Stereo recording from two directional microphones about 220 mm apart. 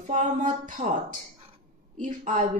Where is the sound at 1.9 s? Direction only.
35° right (ahead or behind).